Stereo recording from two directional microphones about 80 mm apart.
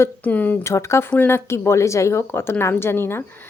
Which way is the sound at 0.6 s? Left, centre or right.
Left.